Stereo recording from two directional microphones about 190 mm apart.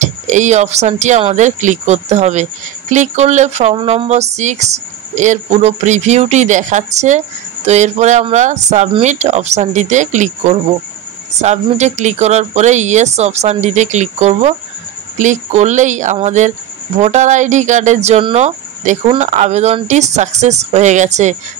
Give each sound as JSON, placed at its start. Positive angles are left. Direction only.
{"t": 0.0, "sound": "speech", "side_deg": -40}